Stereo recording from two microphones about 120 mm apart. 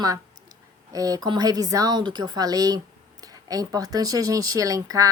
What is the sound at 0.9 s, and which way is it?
Speech, 30° right (ahead or behind).